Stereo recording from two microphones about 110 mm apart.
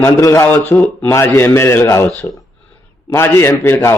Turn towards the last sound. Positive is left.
turn(degrees=20)  # may be behind; listen again after turning